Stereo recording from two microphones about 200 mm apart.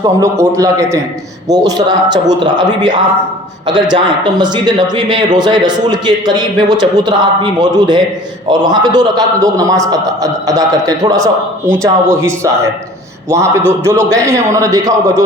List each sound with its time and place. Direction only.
0.0 s a man's voice: 15° right (ahead or behind)